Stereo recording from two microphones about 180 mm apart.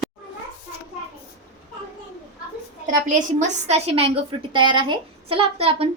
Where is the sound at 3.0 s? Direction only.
45° right (ahead or behind).